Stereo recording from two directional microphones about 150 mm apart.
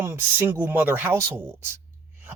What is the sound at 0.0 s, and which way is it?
A man's voice, 15° right (ahead or behind).